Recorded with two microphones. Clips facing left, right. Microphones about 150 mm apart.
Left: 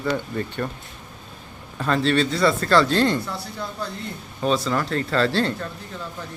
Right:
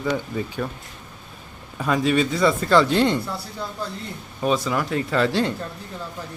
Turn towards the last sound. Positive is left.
turn(degrees=-15)  # may be behind; listen again after turning